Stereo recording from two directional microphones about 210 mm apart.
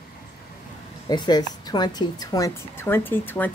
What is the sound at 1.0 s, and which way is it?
A woman's voice, 20° left (ahead or behind).